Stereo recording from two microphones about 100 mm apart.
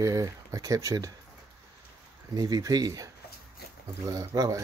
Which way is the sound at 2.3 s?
35° right (ahead or behind).